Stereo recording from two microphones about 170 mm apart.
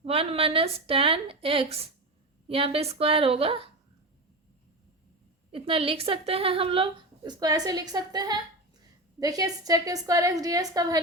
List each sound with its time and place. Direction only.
0.0 s a woman's voice: 35° right (ahead or behind)
5.5 s a woman's voice: 35° right (ahead or behind)
7.2 s a woman's voice: 20° right (ahead or behind)